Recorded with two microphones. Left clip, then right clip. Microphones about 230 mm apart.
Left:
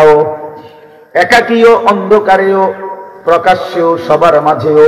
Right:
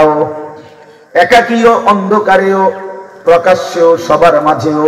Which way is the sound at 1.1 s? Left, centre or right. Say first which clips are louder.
Right 1 dB; left.